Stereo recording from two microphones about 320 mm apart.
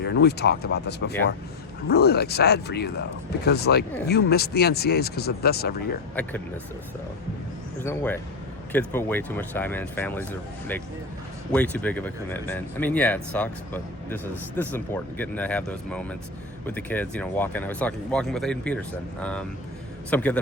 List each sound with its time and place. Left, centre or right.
0.0 s speech: left
7.8 s speech: centre
11.5 s speech: centre